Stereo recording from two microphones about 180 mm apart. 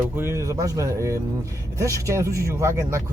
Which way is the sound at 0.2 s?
15° right (ahead or behind).